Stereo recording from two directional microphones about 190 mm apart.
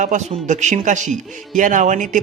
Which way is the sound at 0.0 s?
40° right (ahead or behind).